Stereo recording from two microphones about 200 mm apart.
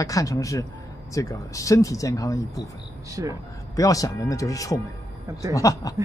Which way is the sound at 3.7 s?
15° left (ahead or behind).